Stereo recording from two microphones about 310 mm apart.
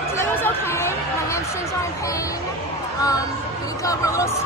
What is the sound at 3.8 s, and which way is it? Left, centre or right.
Speech, centre.